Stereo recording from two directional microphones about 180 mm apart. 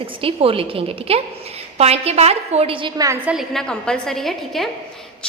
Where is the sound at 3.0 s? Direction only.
10° right (ahead or behind).